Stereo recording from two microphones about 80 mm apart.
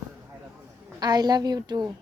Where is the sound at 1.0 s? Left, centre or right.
Right.